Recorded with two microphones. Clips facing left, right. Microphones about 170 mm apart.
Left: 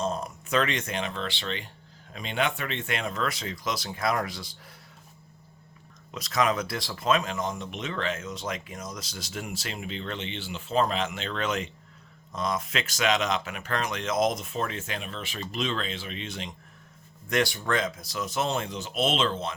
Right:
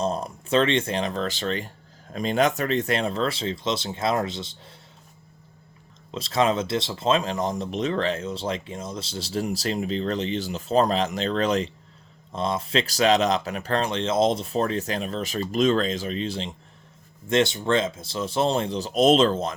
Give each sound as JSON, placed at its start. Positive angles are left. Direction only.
{"t": 0.0, "sound": "speech", "side_deg": -35}
{"t": 6.1, "sound": "speech", "side_deg": -30}